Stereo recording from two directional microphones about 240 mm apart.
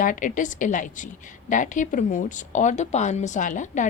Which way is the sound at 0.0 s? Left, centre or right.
Left.